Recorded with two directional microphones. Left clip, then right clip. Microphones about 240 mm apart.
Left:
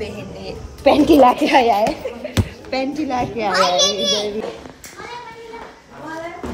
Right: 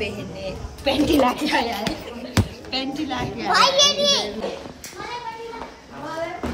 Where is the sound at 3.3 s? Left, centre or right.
Centre.